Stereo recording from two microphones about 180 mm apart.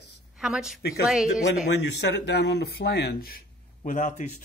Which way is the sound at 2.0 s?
70° left (ahead or behind).